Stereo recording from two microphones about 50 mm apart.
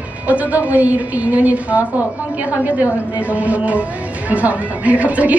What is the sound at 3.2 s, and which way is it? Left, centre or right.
Speech, right.